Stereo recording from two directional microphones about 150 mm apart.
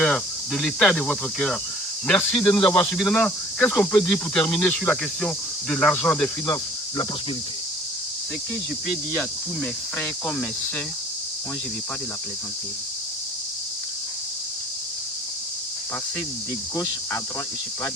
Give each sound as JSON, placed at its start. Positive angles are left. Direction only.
{"t": 0.0, "sound": "speech", "side_deg": 5}
{"t": 2.0, "sound": "cricket", "side_deg": 5}
{"t": 2.7, "sound": "speech", "side_deg": 5}
{"t": 4.0, "sound": "cricket", "side_deg": 5}
{"t": 6.5, "sound": "cricket", "side_deg": 30}
{"t": 10.0, "sound": "cricket", "side_deg": 15}
{"t": 16.7, "sound": "cricket", "side_deg": 15}